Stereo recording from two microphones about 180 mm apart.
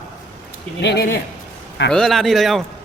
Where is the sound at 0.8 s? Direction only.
70° left (ahead or behind).